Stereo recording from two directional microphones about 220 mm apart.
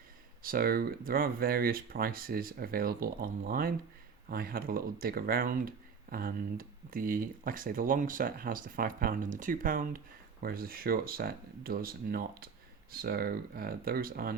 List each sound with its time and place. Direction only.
0.4 s speech: 40° right (ahead or behind)